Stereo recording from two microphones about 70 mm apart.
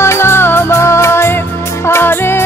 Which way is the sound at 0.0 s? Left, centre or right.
Left.